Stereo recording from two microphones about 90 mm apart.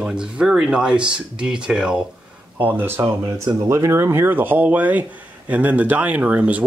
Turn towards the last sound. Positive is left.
turn(degrees=-15)  # may be behind; listen again after turning